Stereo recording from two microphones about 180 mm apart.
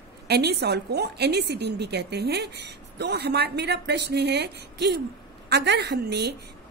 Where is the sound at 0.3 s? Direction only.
65° right (ahead or behind).